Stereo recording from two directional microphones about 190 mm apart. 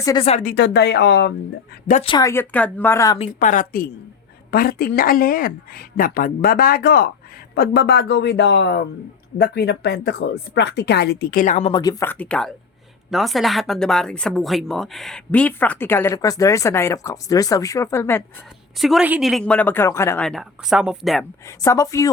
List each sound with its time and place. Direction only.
0.0 s speech: 20° left (ahead or behind)
0.3 s speech: 40° left (ahead or behind)
0.5 s speech: 65° left (ahead or behind)
1.9 s speech: 35° left (ahead or behind)
2.1 s speech: 15° left (ahead or behind)
3.2 s speech: 45° left (ahead or behind)
11.7 s a woman's voice: 20° left (ahead or behind)
18.8 s a woman's voice: centre (ahead or behind); by 20.2 s 15° left (ahead or behind)
20.2 s a woman's voice: centre (ahead or behind)
21.6 s speech: 15° left (ahead or behind)